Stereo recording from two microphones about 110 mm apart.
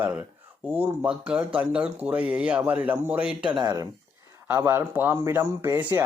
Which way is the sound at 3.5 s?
40° right (ahead or behind).